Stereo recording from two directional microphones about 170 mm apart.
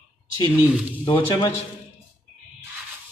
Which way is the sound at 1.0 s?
25° left (ahead or behind).